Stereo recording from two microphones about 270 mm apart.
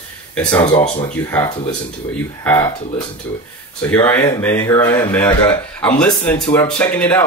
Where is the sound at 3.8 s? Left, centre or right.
Centre.